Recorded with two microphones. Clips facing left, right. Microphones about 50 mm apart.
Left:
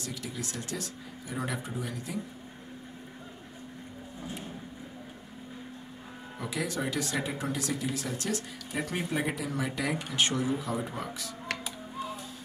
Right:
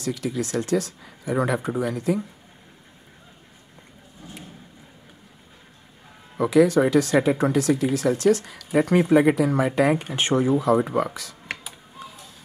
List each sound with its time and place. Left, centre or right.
0.0 s speech: right
6.3 s speech: right
10.6 s speech: right